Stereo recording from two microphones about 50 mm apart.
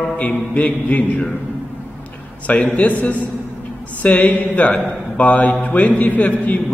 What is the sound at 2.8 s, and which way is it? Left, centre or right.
A man's voice, left.